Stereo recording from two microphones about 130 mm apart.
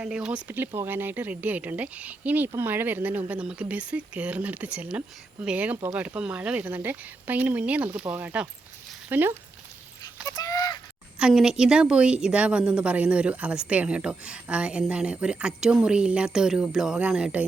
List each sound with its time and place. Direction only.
0.0 s a woman's voice: 5° right (ahead or behind)
10.3 s fowl: 25° left (ahead or behind)
11.2 s a woman's voice: 5° right (ahead or behind)